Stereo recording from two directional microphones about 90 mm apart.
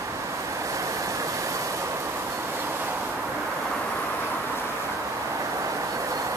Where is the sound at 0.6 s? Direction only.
35° right (ahead or behind).